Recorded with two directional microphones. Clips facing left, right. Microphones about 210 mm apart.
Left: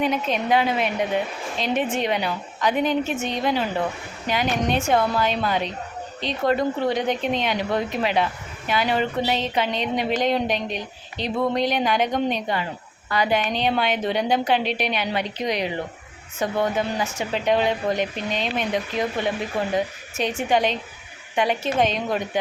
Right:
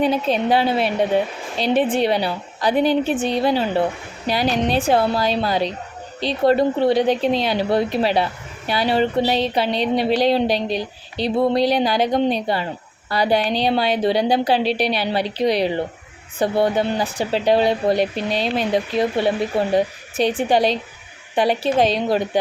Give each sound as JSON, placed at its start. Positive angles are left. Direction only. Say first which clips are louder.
{"t": 0.0, "sound": "speech", "louder": "right 5 dB", "side_deg": -35}